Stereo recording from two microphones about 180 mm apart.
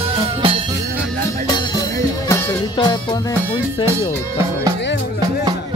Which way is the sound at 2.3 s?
15° left (ahead or behind).